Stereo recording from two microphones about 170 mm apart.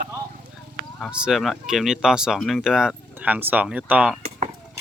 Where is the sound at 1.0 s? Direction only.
5° right (ahead or behind).